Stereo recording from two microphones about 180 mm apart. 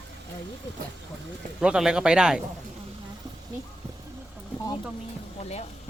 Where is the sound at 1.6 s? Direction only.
5° right (ahead or behind).